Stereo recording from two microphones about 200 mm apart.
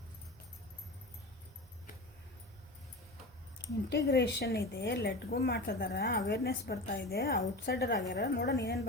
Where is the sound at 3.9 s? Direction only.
55° left (ahead or behind).